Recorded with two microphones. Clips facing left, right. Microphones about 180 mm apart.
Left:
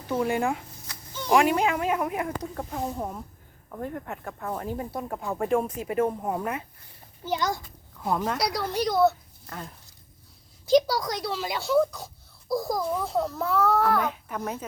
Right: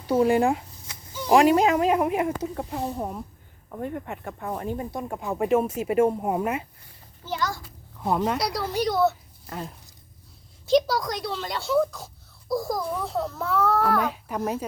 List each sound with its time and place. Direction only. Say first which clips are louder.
0.1 s a woman's voice: right 6 dB; 30° right (ahead or behind)
0.9 s a sound: even; 20° right (ahead or behind)
1.3 s a woman's voice: right 4 dB; 30° right (ahead or behind)
2.4 s a child's voice: right 2 dB; 5° right (ahead or behind)
7.3 s a child's voice: left 2 dB; 20° left (ahead or behind)
8.0 s speech: right 3 dB; 15° right (ahead or behind)
8.4 s a child's voice: right 1 dB; 5° right (ahead or behind)
9.5 s speech: right 4 dB; 20° right (ahead or behind)
10.7 s a child's voice: even; centre (ahead or behind)
14.3 s speech: right 8 dB; 25° right (ahead or behind)